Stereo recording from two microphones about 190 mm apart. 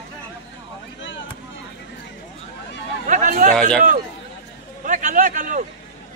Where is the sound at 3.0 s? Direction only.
40° right (ahead or behind).